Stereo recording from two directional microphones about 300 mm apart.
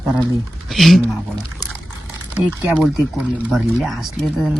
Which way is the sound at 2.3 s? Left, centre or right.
Centre.